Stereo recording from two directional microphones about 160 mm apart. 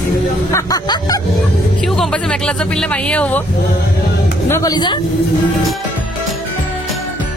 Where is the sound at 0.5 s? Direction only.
20° left (ahead or behind).